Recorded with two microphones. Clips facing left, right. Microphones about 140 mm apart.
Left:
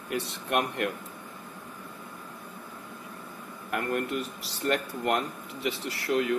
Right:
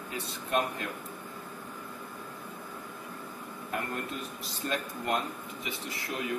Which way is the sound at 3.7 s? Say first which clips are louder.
Left 6 dB; 75° left (ahead or behind).